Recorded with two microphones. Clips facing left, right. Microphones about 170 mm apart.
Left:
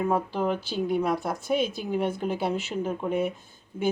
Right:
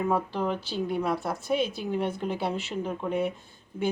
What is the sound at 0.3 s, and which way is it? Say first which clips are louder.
A woman's voice: left 2 dB; centre (ahead or behind).